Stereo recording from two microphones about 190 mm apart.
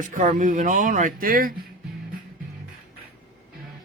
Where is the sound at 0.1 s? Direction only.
45° right (ahead or behind).